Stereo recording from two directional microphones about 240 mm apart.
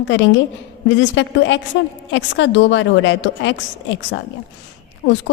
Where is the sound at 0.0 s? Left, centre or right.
Left.